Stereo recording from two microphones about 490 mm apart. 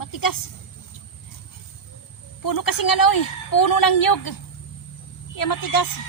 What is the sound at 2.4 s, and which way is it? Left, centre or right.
A woman's voice, left.